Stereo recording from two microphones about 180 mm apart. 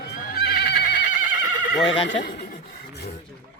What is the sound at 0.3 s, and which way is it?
Neigh, 65° left (ahead or behind).